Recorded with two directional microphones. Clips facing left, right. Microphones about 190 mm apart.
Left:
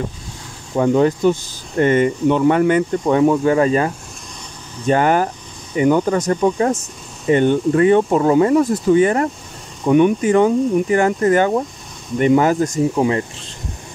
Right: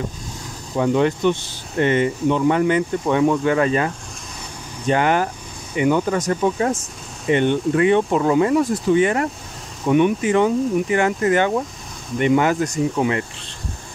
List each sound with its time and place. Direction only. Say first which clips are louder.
0.7 s speech: left 3 dB; 40° left (ahead or behind)
12.9 s speech: left 3 dB; 30° left (ahead or behind)